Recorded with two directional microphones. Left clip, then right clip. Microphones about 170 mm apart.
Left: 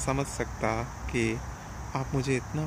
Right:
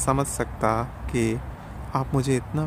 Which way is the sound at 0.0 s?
15° right (ahead or behind).